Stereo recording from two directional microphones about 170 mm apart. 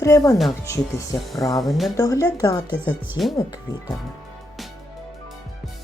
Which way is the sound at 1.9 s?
20° left (ahead or behind).